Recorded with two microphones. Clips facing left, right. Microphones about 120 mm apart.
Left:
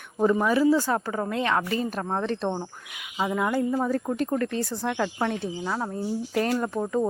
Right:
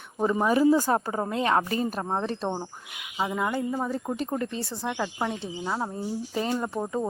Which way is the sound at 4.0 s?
10° right (ahead or behind).